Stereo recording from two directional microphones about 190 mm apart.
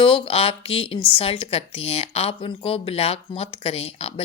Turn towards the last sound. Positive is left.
turn(degrees=30)  # may be behind; listen again after turning